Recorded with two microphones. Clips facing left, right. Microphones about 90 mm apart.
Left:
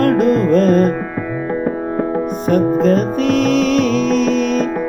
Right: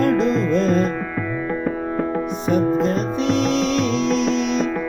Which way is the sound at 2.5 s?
45° left (ahead or behind).